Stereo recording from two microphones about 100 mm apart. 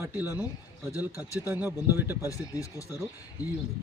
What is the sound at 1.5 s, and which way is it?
Speech, 20° right (ahead or behind).